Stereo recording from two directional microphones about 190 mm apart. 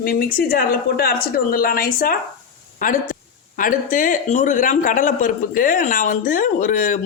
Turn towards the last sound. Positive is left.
turn(degrees=45)  # may be behind; listen again after turning